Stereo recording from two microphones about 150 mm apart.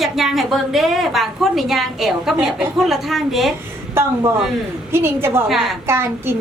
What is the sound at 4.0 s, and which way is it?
A woman's voice, 15° right (ahead or behind).